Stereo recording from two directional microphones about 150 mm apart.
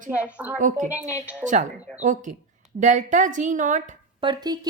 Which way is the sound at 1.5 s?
55° right (ahead or behind).